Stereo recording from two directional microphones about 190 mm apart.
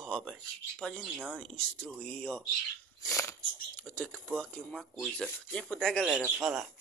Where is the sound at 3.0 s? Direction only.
15° left (ahead or behind).